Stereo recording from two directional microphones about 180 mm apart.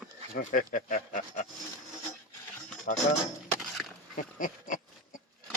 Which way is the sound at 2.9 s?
55° left (ahead or behind).